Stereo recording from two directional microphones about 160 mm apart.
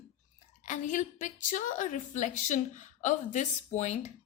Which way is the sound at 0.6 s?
50° left (ahead or behind).